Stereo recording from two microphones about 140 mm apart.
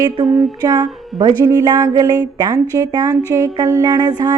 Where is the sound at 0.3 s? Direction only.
30° right (ahead or behind).